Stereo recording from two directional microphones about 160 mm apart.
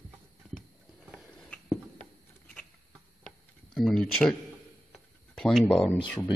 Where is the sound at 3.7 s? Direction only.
5° left (ahead or behind).